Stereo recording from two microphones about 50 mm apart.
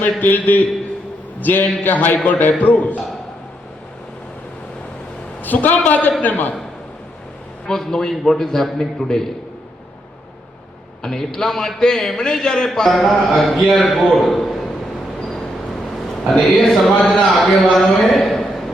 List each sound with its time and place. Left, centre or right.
0.0 s a man's voice: left
5.4 s a man's voice: left
7.7 s a man's voice: centre
11.0 s a man's voice: centre
16.4 s a man's voice: centre